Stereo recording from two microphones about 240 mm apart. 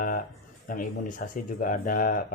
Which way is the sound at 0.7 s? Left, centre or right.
Left.